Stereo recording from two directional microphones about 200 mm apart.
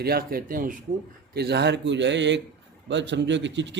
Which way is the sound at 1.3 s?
55° right (ahead or behind).